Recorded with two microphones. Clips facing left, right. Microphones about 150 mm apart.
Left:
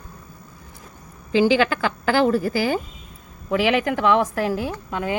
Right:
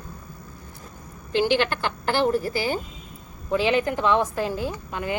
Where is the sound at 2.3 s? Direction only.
90° left; by 5.0 s 70° left (ahead or behind).